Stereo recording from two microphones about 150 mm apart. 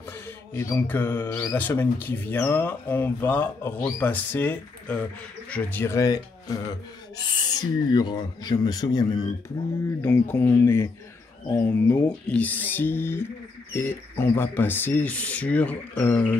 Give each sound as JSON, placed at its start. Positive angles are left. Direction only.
{"t": 0.6, "sound": "speech", "side_deg": 15}
{"t": 7.4, "sound": "speech", "side_deg": 25}
{"t": 10.0, "sound": "speech", "side_deg": 15}